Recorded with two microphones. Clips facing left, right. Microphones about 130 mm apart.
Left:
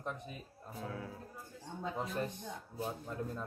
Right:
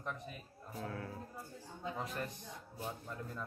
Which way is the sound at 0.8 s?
5° left (ahead or behind).